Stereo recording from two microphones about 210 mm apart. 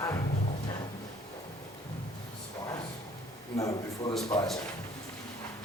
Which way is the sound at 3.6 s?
15° left (ahead or behind).